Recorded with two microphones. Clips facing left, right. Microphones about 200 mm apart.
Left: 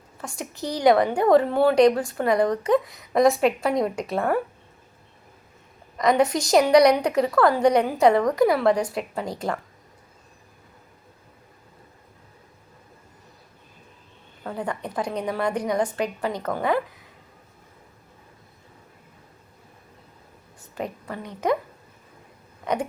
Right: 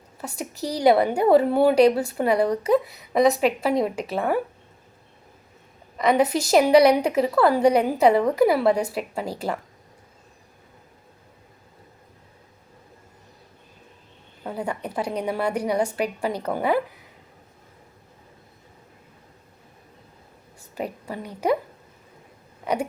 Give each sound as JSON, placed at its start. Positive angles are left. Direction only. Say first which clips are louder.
{"t": 0.3, "sound": "a woman's voice", "louder": "right 2 dB", "side_deg": -35}
{"t": 0.9, "sound": "a woman's voice", "louder": "even", "side_deg": -10}
{"t": 6.0, "sound": "a woman's voice", "louder": "even", "side_deg": -5}
{"t": 14.4, "sound": "a woman's voice", "louder": "right 1 dB", "side_deg": -10}
{"t": 20.7, "sound": "a woman's voice", "louder": "right 1 dB", "side_deg": -10}
{"t": 22.6, "sound": "a sound", "louder": "right 1 dB", "side_deg": -10}